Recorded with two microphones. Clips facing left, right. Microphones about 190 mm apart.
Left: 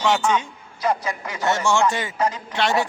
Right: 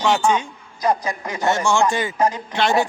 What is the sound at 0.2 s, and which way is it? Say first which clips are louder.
Speech: right 2 dB; 30° right (ahead or behind).